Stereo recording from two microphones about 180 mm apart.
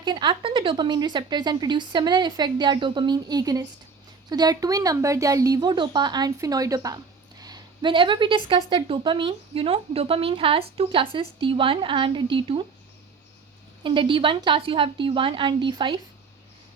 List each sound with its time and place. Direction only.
0.0 s speech: 25° right (ahead or behind)
13.8 s speech: 30° right (ahead or behind)